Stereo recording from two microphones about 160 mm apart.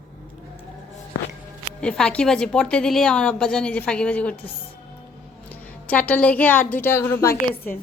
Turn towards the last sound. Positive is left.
turn(degrees=15)  # may be behind; listen again after turning